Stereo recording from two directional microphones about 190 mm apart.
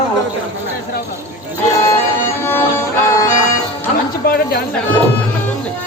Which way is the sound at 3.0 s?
15° left (ahead or behind).